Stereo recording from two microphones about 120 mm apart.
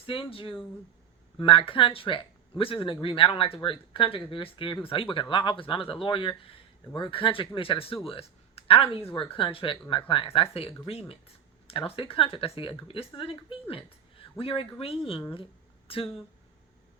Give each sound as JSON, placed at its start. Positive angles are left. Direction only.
{"t": 0.0, "sound": "speech", "side_deg": 50}